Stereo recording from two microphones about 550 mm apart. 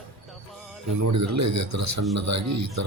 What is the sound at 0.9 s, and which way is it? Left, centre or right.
Speech, right.